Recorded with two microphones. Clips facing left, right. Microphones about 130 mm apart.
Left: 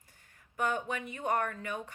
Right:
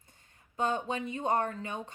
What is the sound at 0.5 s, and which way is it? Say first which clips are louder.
Speech: right 2 dB; 25° right (ahead or behind).